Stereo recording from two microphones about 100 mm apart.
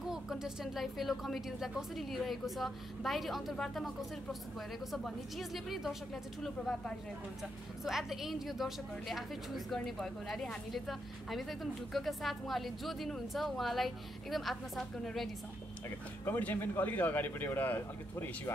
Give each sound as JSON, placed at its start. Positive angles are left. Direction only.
{"t": 0.0, "sound": "a woman's voice", "side_deg": -5}
{"t": 16.3, "sound": "speech", "side_deg": 20}